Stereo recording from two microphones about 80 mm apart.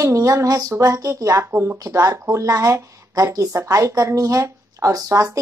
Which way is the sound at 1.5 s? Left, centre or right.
Right.